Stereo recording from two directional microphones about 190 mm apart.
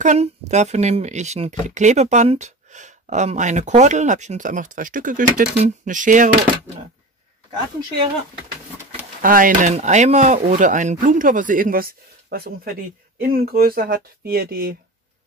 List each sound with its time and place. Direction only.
0.0 s speech: 35° right (ahead or behind)
9.2 s speech: 45° right (ahead or behind)